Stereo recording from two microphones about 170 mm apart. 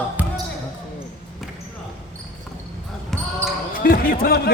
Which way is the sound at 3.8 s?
55° left (ahead or behind).